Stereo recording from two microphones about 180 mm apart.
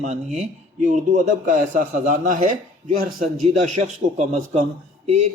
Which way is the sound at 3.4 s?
40° right (ahead or behind).